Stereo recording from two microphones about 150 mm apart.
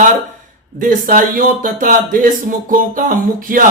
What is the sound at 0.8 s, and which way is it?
Speech, 65° right (ahead or behind).